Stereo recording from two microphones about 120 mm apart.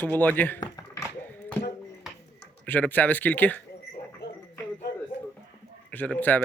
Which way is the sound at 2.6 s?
15° left (ahead or behind).